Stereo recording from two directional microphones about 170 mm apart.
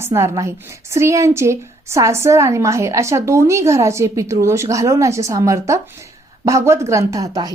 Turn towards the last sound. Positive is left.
turn(degrees=-20)  # may be behind; listen again after turning